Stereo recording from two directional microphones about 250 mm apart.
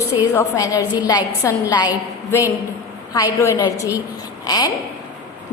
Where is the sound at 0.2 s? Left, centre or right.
Centre.